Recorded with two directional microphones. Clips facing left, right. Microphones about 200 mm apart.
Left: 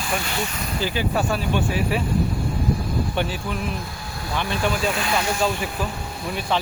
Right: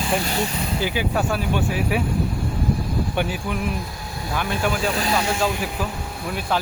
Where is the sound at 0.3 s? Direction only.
35° right (ahead or behind).